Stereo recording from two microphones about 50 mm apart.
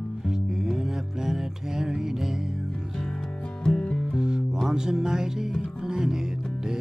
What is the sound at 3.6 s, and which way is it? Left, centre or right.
Music, centre.